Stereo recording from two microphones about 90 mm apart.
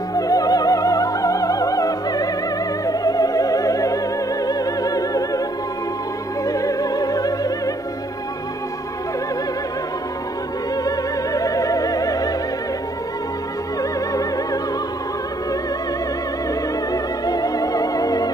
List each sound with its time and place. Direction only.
0.1 s music: 40° left (ahead or behind)
6.4 s opera: 40° left (ahead or behind)
10.8 s music: 40° left (ahead or behind)
14.1 s music: 40° left (ahead or behind)
16.9 s music: 40° left (ahead or behind)